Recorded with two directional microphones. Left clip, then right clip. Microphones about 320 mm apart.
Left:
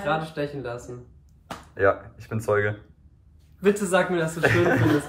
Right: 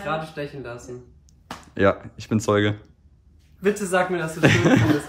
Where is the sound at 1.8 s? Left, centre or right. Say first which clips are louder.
Right 1 dB; right.